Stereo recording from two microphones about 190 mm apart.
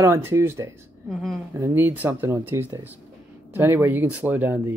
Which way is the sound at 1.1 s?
Centre (ahead or behind).